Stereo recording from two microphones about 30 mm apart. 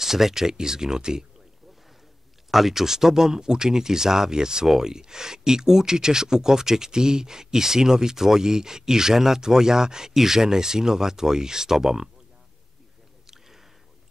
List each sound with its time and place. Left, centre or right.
0.0 s speech: centre
2.5 s speech: centre